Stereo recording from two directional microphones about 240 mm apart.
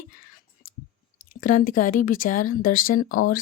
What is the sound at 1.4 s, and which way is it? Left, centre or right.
Speech, left.